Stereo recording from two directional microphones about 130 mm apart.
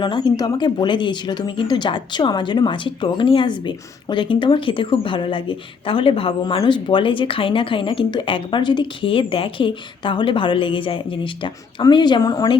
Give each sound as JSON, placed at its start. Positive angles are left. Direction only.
{"t": 0.0, "sound": "speech", "side_deg": 35}